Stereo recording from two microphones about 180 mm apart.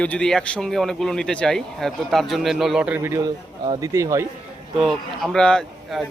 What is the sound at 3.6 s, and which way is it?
Speech, 25° right (ahead or behind).